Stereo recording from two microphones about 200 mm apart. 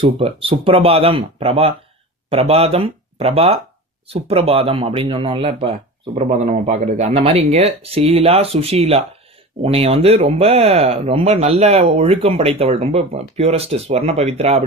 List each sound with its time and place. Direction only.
0.0 s speech: 30° right (ahead or behind)